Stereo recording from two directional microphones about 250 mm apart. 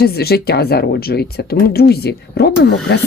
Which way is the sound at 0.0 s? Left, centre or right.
Left.